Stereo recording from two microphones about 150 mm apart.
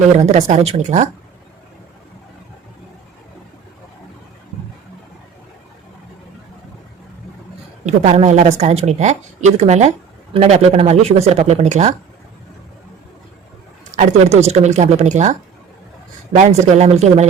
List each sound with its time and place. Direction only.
0.3 s speech: 50° right (ahead or behind)
7.9 s speech: 50° right (ahead or behind)
13.9 s speech: 50° right (ahead or behind)